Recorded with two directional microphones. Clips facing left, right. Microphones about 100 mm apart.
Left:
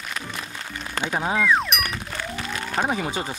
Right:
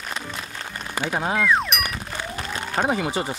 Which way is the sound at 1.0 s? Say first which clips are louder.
Even; 10° right (ahead or behind).